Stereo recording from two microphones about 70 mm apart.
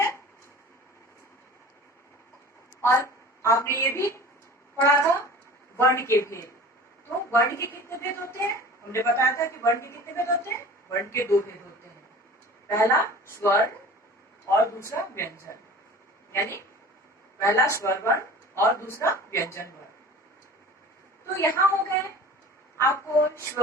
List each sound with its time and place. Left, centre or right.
2.8 s a woman's voice: left
12.6 s a woman's voice: left
21.4 s a woman's voice: left